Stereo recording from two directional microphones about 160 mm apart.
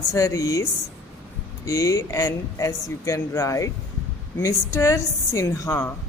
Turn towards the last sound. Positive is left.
turn(degrees=15)  # may be behind; listen again after turning